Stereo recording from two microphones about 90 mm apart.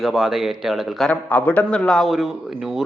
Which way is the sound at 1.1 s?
15° left (ahead or behind).